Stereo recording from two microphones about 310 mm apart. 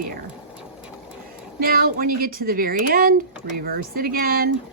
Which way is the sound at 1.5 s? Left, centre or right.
Right.